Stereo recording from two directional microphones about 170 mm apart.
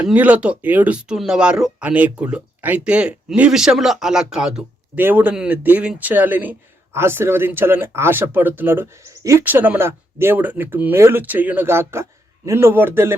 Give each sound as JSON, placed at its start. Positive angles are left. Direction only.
{"t": 0.0, "sound": "speech", "side_deg": -10}